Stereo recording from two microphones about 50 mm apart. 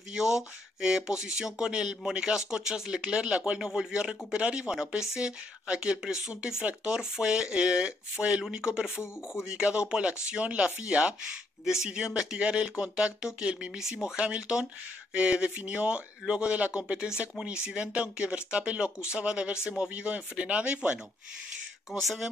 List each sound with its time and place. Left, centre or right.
0.1 s speech: centre
11.6 s speech: centre
21.9 s speech: centre